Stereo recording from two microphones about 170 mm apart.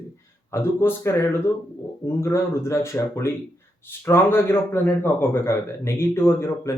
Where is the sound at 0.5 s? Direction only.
15° left (ahead or behind).